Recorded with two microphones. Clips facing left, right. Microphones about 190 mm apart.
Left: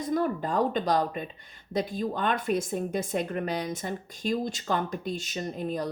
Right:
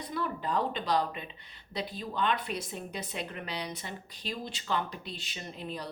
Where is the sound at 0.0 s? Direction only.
45° left (ahead or behind).